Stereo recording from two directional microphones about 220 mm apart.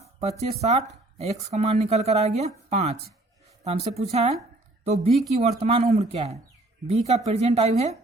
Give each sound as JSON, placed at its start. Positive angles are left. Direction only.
{"t": 0.2, "sound": "speech", "side_deg": -30}
{"t": 5.4, "sound": "speech", "side_deg": -25}